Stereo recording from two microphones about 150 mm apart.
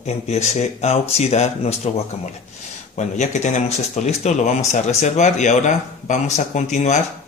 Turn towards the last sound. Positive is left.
turn(degrees=50)  # may be behind; listen again after turning